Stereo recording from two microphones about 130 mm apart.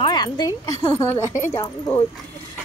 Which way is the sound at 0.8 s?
20° left (ahead or behind).